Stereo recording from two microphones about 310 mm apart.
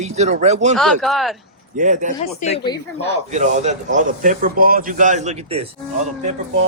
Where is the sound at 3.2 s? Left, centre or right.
Right.